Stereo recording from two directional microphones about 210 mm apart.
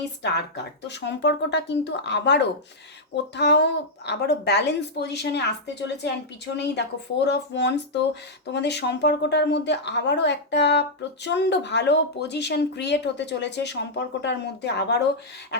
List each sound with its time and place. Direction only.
0.2 s a woman's voice: 55° left (ahead or behind)